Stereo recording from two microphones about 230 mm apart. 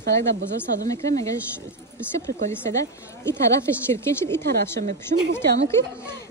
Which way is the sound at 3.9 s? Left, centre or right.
Centre.